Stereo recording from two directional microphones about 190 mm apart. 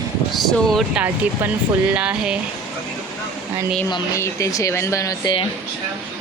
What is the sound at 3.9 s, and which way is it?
Speech, 15° left (ahead or behind).